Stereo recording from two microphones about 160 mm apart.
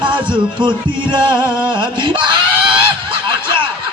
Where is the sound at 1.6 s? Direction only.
30° right (ahead or behind).